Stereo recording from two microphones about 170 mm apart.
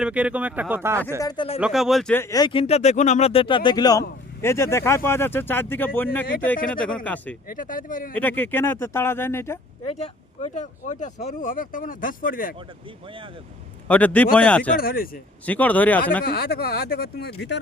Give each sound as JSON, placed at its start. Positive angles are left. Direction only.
{"t": 0.0, "sound": "speech", "side_deg": -5}
{"t": 1.2, "sound": "speech", "side_deg": 25}
{"t": 1.6, "sound": "speech", "side_deg": 0}
{"t": 2.1, "sound": "speech", "side_deg": 20}
{"t": 7.4, "sound": "speech", "side_deg": 55}
{"t": 8.1, "sound": "speech", "side_deg": 10}
{"t": 9.8, "sound": "speech", "side_deg": 40}
{"t": 13.1, "sound": "speech", "side_deg": -30}
{"t": 13.8, "sound": "speech", "side_deg": 10}
{"t": 14.8, "sound": "speech", "side_deg": 60}
{"t": 15.4, "sound": "speech", "side_deg": 10}
{"t": 16.2, "sound": "speech", "side_deg": 65}